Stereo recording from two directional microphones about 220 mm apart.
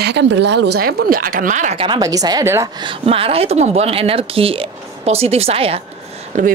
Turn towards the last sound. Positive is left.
turn(degrees=-30)  # may be behind; listen again after turning